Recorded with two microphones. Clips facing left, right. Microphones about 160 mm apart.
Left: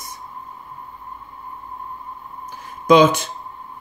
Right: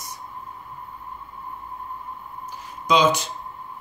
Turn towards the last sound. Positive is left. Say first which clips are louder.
# left 6 dB
turn(degrees=55)  # may be behind; listen again after turning